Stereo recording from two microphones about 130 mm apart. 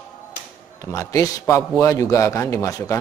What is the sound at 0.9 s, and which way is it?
A man's voice, 25° left (ahead or behind).